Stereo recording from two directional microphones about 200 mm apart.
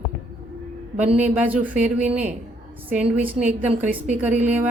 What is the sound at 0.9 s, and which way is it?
Speech, 5° right (ahead or behind).